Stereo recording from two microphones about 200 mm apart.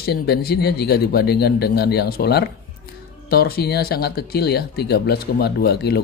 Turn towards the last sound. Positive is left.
turn(degrees=55)  # may be behind; listen again after turning